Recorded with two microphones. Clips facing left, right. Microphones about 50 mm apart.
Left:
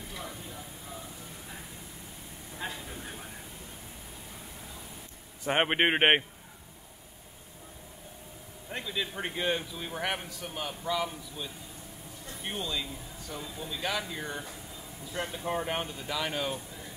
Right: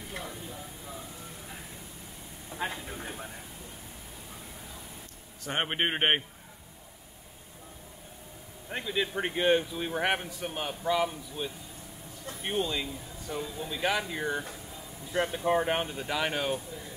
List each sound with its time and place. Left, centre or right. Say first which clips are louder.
2.6 s a sound: right 4 dB; right
5.4 s a man's voice: left 4 dB; centre
8.6 s a man's voice: right 3 dB; centre